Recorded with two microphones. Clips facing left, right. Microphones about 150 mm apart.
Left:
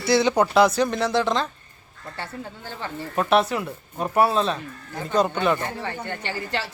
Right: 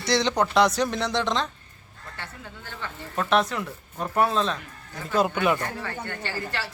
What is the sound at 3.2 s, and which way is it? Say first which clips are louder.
Speech: left 3 dB; 10° left (ahead or behind).